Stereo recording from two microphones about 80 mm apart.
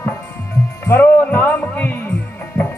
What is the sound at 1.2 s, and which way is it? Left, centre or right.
Music, left.